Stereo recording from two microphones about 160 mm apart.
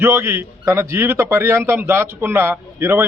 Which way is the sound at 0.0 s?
15° right (ahead or behind).